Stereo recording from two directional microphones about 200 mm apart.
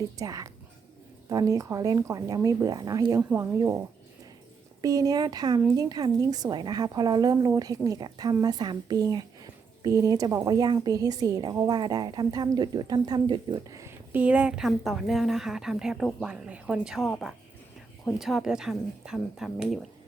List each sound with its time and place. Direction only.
0.2 s speech: 15° right (ahead or behind); by 19.9 s centre (ahead or behind)